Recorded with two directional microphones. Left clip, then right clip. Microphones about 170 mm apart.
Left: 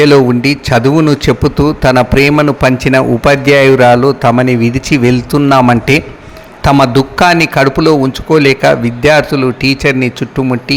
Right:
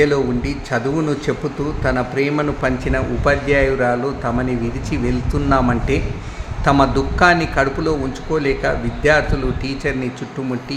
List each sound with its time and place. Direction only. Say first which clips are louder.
0.0 s a man's voice: left 10 dB; 70° left (ahead or behind)